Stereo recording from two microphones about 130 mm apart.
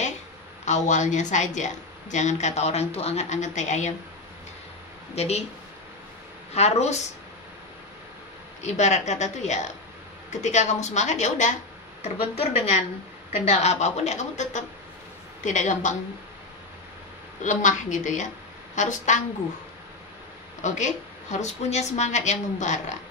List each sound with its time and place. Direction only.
0.7 s a woman's voice: 65° left (ahead or behind)
5.1 s a woman's voice: 55° left (ahead or behind)
6.5 s a woman's voice: 55° left (ahead or behind)
8.6 s a woman's voice: 60° left (ahead or behind)
12.0 s a woman's voice: 55° left (ahead or behind)
17.4 s a woman's voice: 70° left (ahead or behind)
20.6 s a woman's voice: 65° left (ahead or behind)